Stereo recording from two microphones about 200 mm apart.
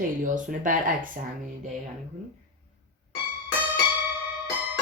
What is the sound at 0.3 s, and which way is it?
Speech, 40° right (ahead or behind).